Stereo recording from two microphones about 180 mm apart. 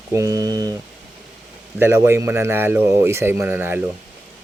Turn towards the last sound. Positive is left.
turn(degrees=-10)  # may be behind; listen again after turning